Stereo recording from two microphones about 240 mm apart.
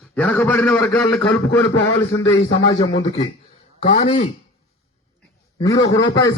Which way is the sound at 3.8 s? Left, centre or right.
Left.